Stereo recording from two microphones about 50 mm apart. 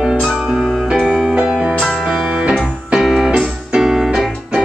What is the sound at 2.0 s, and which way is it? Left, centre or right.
Music, centre.